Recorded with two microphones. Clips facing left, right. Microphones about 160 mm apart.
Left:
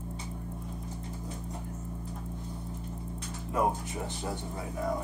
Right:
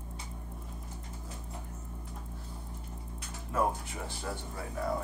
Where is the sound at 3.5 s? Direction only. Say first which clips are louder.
Left 2 dB; 20° left (ahead or behind).